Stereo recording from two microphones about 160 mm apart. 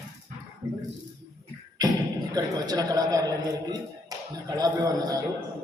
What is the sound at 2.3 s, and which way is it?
Speech, 25° right (ahead or behind).